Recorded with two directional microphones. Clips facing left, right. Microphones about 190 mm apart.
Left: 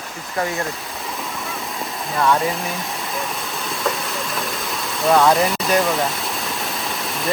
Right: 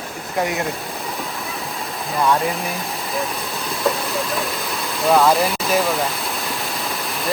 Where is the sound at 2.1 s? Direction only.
Centre (ahead or behind).